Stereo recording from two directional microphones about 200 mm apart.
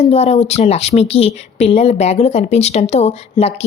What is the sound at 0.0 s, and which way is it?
Speech, 30° left (ahead or behind).